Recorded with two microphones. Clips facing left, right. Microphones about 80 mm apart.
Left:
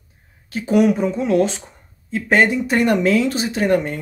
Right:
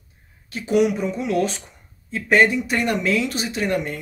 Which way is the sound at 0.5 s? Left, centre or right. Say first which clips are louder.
Left 3 dB; left.